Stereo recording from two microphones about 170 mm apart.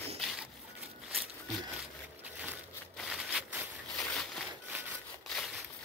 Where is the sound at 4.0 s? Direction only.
5° left (ahead or behind).